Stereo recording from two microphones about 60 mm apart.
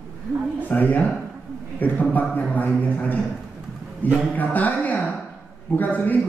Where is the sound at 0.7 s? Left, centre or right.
Left.